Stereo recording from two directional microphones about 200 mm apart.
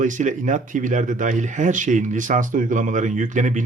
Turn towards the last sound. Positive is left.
turn(degrees=-40)  # may be behind; listen again after turning